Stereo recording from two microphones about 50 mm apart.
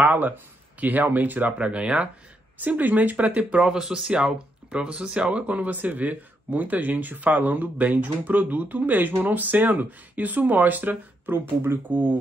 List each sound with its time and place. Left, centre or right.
0.0 s speech: right
2.6 s speech: right
3.6 s speech: centre; by 12.2 s right